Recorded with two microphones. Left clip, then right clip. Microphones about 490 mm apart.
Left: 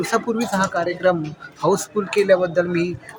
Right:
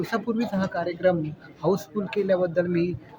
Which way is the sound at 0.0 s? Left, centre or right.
Right.